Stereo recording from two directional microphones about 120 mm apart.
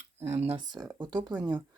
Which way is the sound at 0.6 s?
40° right (ahead or behind).